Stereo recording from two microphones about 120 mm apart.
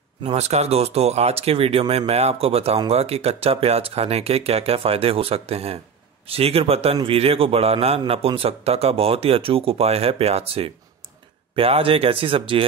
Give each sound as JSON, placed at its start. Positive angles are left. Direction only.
{"t": 0.2, "sound": "speech", "side_deg": -65}